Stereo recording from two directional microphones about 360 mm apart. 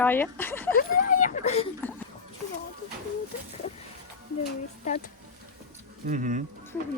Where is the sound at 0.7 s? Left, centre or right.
Left.